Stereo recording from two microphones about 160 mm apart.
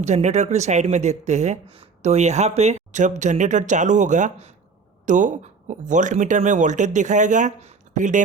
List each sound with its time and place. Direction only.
0.0 s speech: 45° right (ahead or behind)